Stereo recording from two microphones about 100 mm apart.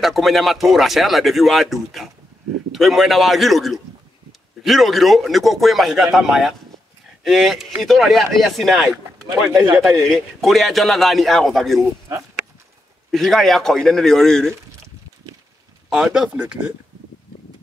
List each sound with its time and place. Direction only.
0.0 s a man's voice: centre (ahead or behind)
13.1 s speech: centre (ahead or behind)
15.9 s speech: 5° right (ahead or behind)
16.3 s speech: 20° right (ahead or behind)